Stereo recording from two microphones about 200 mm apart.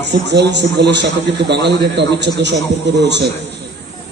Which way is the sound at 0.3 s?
55° right (ahead or behind).